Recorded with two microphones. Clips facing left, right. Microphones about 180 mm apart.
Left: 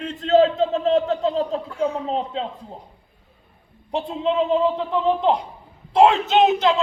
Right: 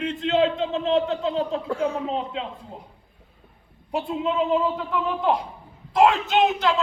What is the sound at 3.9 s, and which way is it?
A man's voice, 30° left (ahead or behind).